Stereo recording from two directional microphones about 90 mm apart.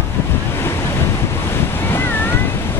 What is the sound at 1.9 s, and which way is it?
Cat, 25° left (ahead or behind).